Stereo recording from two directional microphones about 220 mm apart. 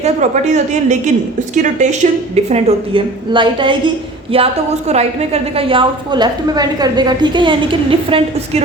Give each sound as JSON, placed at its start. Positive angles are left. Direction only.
{"t": 0.0, "sound": "a woman's voice", "side_deg": -30}